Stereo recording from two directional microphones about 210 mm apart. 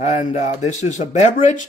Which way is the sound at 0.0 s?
35° left (ahead or behind).